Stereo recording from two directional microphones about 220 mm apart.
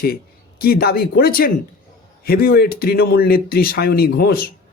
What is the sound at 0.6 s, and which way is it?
Speech, 45° left (ahead or behind).